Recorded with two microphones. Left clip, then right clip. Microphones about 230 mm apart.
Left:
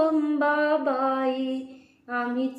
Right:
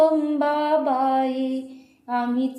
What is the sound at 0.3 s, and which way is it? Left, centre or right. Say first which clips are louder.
Mantra: right 2 dB; right.